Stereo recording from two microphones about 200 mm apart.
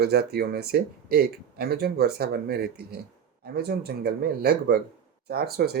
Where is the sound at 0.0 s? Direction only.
50° right (ahead or behind).